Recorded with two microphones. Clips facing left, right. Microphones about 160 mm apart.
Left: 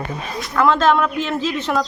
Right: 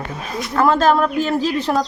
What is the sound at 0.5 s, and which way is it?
A woman's voice, 40° right (ahead or behind).